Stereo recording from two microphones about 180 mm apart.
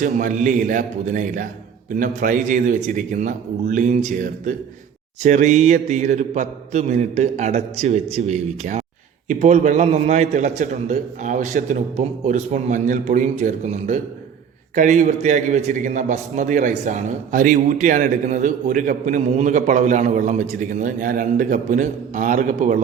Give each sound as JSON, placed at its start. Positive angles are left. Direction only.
{"t": 0.0, "sound": "a man's voice", "side_deg": -45}